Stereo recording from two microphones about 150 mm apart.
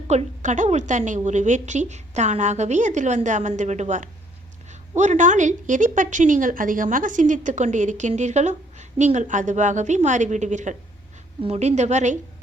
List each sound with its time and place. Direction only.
0.1 s a woman's voice: 50° right (ahead or behind)